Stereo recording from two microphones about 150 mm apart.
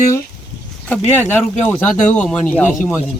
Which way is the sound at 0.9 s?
15° left (ahead or behind).